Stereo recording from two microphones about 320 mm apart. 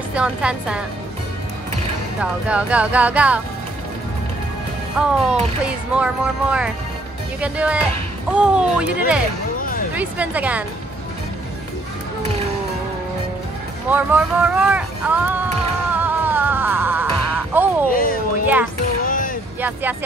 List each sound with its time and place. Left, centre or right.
0.1 s speech: centre
2.1 s speech: centre
4.9 s speech: centre
9.6 s music: left
9.9 s speech: centre
13.8 s music: centre
17.9 s a sound: left
19.6 s speech: centre